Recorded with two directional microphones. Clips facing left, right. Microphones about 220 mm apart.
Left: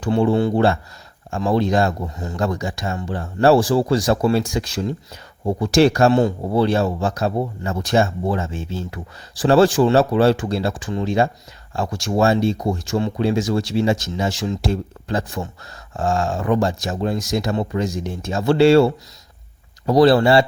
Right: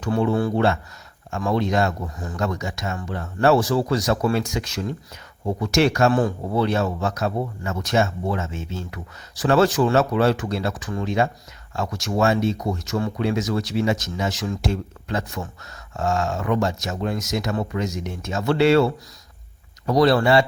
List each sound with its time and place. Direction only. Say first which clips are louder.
0.0 s speech: left 4 dB; 30° left (ahead or behind)